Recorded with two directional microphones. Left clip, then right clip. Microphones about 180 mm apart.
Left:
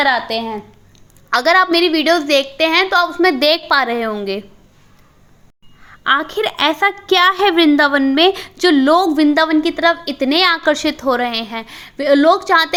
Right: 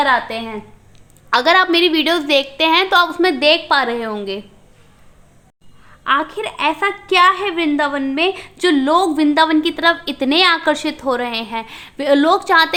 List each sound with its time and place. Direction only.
0.0 s a woman's voice: 15° left (ahead or behind)
3.2 s a woman's voice: 15° left (ahead or behind)
5.8 s a woman's voice: 25° left (ahead or behind)
8.5 s a woman's voice: 15° left (ahead or behind)